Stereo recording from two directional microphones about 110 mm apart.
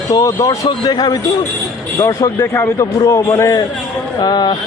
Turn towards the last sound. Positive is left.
turn(degrees=40)  # may be behind; listen again after turning